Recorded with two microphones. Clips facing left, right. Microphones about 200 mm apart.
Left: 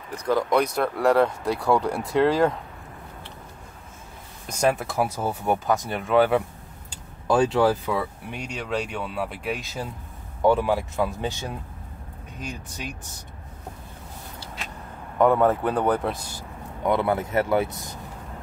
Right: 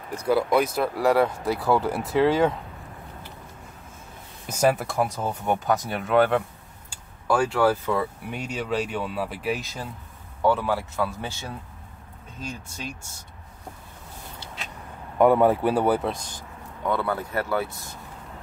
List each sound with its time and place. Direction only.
0.2 s speech: 10° right (ahead or behind)
4.5 s speech: 5° right (ahead or behind)
6.9 s a sound: 20° left (ahead or behind)
7.9 s speech: centre (ahead or behind)
10.4 s speech: 15° left (ahead or behind)
15.1 s speech: 10° right (ahead or behind)
16.1 s vehicle: 10° left (ahead or behind)
16.9 s speech: 20° left (ahead or behind)